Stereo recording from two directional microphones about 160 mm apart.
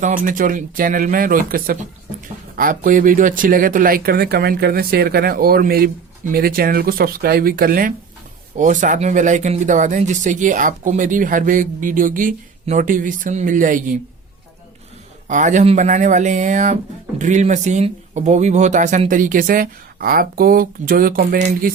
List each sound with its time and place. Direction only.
0.0 s speech: 55° right (ahead or behind)
8.5 s speech: 50° right (ahead or behind)
15.3 s speech: 50° right (ahead or behind)